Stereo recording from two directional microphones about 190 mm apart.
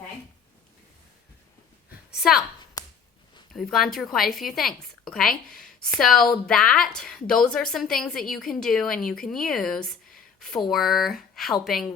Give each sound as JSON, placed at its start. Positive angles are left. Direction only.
{"t": 2.1, "sound": "a woman's voice", "side_deg": 0}
{"t": 2.8, "sound": "a sound", "side_deg": 20}
{"t": 3.5, "sound": "a woman's voice", "side_deg": 0}